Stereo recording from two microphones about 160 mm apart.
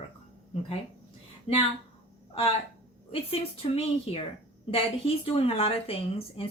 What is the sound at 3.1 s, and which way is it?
Speech, 40° left (ahead or behind).